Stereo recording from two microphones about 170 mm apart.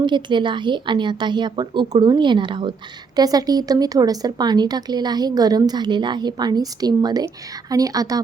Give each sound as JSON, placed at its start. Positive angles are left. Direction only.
{"t": 0.0, "sound": "a woman's voice", "side_deg": -25}